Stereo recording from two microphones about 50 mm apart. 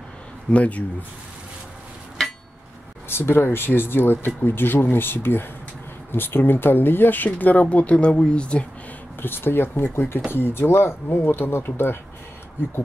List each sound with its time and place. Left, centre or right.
0.5 s speech: left
3.1 s speech: left
9.2 s speech: left